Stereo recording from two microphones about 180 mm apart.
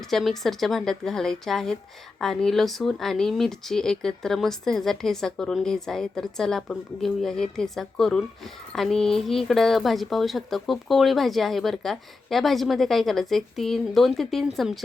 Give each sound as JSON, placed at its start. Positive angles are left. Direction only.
{"t": 0.1, "sound": "a woman's voice", "side_deg": 0}